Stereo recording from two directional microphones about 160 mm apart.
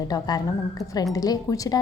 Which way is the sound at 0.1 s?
25° left (ahead or behind).